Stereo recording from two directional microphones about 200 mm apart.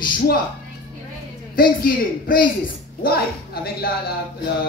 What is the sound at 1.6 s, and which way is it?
A woman's voice, 45° left (ahead or behind).